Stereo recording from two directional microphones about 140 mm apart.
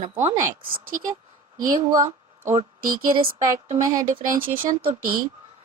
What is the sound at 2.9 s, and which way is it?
Speech, 40° right (ahead or behind).